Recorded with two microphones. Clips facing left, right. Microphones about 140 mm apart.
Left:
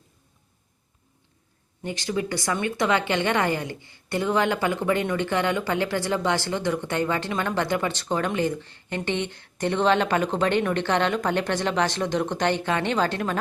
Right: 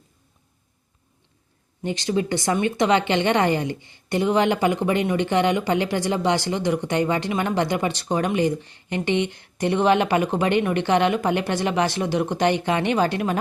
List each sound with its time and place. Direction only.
1.8 s a woman's voice: 20° right (ahead or behind)